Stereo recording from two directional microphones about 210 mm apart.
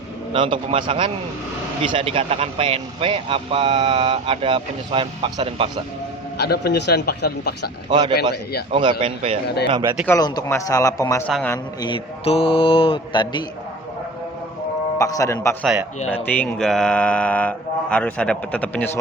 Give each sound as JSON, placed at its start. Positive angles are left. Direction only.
{"t": 0.3, "sound": "speech", "side_deg": -25}
{"t": 6.3, "sound": "a man's voice", "side_deg": 50}
{"t": 7.9, "sound": "speech", "side_deg": -20}
{"t": 10.1, "sound": "a man's voice", "side_deg": 20}
{"t": 11.3, "sound": "speech", "side_deg": 0}
{"t": 11.5, "sound": "speech", "side_deg": 20}
{"t": 14.9, "sound": "a man's voice", "side_deg": 15}
{"t": 15.6, "sound": "speech", "side_deg": -5}
{"t": 16.0, "sound": "speech", "side_deg": 10}